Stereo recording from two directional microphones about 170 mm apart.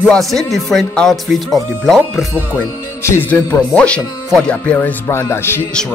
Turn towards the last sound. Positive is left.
turn(degrees=15)  # may be behind; listen again after turning